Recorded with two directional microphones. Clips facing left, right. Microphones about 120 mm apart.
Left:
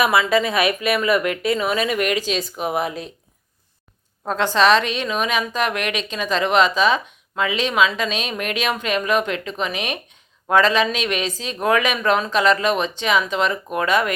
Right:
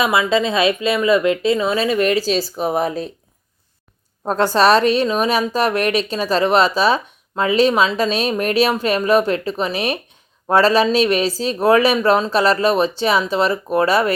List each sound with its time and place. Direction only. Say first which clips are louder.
0.0 s speech: right 1 dB; 25° right (ahead or behind)
4.3 s a woman's voice: right 3 dB; 40° right (ahead or behind)